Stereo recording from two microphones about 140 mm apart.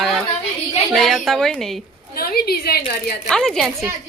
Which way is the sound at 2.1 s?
90° left.